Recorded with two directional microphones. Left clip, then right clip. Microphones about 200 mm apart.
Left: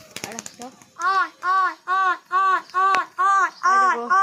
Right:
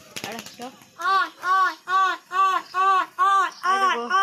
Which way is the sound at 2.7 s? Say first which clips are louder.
Left 1 dB; 10° left (ahead or behind).